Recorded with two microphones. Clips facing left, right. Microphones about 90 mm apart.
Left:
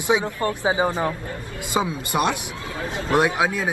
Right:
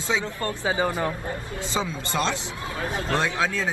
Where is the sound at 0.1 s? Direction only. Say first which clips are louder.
Left 5 dB; 15° left (ahead or behind).